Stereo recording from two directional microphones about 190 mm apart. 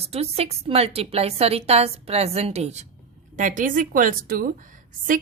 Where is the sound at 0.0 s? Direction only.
30° right (ahead or behind).